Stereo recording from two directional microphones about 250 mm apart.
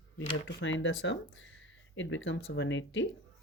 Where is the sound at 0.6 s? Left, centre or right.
Left.